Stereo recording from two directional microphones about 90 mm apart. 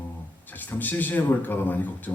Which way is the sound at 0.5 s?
20° left (ahead or behind).